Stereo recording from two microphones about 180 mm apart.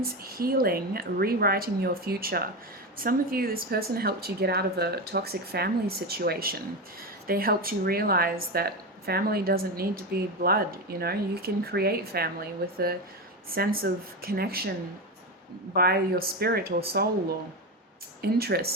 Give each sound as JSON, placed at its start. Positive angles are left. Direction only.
{"t": 0.0, "sound": "speech", "side_deg": -55}
{"t": 15.7, "sound": "speech", "side_deg": -60}
{"t": 18.2, "sound": "speech", "side_deg": -60}